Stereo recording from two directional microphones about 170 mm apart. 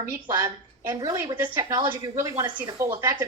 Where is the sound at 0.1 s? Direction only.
10° right (ahead or behind).